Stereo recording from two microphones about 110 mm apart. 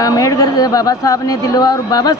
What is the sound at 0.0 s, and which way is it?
Speech, 30° left (ahead or behind).